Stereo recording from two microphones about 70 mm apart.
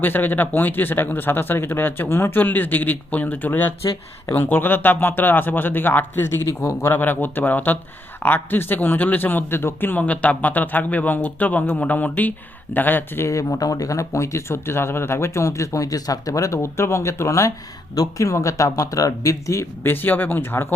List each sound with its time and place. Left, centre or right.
0.0 s speech: left
6.4 s speech: left
10.0 s speech: centre
13.2 s speech: left
17.9 s speech: left
19.8 s speech: left